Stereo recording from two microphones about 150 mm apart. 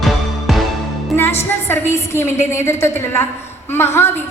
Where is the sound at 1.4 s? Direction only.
15° left (ahead or behind).